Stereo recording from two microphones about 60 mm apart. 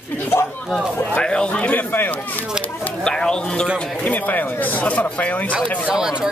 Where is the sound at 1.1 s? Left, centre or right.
Centre.